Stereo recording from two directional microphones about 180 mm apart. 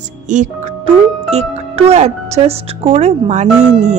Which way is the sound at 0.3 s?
45° right (ahead or behind).